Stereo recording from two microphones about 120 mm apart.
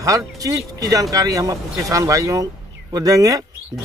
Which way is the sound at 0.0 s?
30° right (ahead or behind).